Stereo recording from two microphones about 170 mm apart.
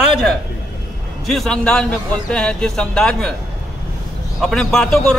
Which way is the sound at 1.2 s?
Centre (ahead or behind).